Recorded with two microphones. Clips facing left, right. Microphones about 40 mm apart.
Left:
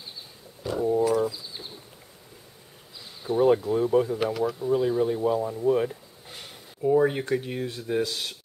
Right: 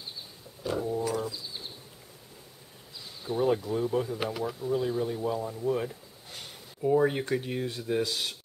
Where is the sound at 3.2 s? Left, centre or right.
Centre.